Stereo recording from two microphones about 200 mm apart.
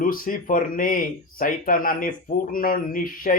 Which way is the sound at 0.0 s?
40° left (ahead or behind).